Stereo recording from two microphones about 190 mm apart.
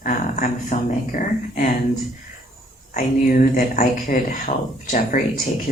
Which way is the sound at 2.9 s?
45° left (ahead or behind).